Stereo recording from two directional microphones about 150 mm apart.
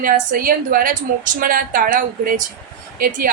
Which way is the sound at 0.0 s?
70° right (ahead or behind).